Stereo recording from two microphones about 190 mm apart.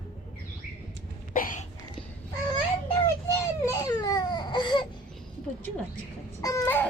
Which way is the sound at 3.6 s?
20° left (ahead or behind).